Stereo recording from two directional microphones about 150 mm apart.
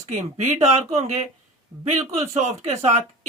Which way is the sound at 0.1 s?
50° right (ahead or behind).